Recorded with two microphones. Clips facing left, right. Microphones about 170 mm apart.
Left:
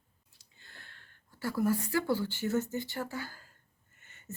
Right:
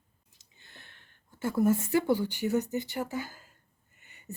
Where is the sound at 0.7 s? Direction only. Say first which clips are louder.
Right 1 dB; 20° right (ahead or behind).